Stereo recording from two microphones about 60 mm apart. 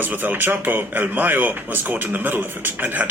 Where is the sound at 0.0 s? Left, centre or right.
Right.